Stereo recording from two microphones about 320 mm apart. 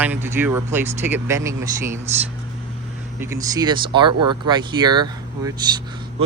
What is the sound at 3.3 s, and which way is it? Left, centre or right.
Speech, centre.